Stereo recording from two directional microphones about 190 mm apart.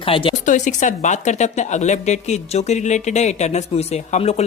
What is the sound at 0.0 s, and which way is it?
Speech, 30° left (ahead or behind).